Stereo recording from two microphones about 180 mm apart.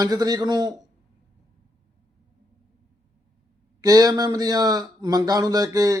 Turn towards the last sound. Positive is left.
turn(degrees=-20)  # may be behind; listen again after turning